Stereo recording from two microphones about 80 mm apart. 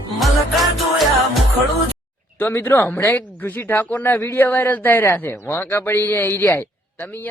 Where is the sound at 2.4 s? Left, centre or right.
Left.